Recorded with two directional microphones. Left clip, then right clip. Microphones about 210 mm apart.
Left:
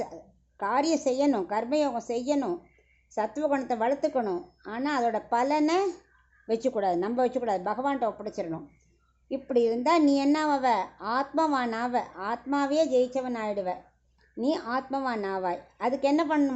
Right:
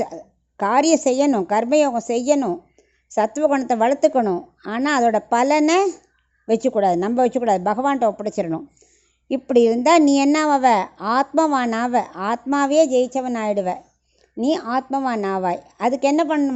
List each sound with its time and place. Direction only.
0.0 s a woman's voice: 35° right (ahead or behind)